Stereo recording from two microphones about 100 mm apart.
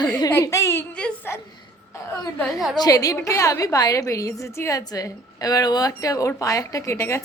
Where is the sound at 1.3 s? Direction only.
20° left (ahead or behind).